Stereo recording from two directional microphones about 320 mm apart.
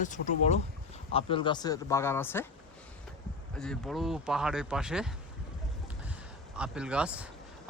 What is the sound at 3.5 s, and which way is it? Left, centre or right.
Speech, centre.